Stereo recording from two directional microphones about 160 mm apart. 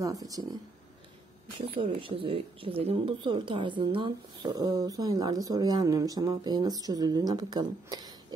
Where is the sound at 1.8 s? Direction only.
35° right (ahead or behind).